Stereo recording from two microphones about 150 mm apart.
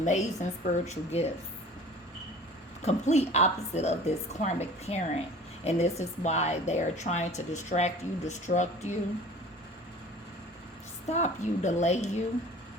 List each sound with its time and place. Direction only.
0.0 s a woman's voice: 55° left (ahead or behind)
2.8 s a woman's voice: 45° left (ahead or behind)
11.1 s a woman's voice: 50° left (ahead or behind)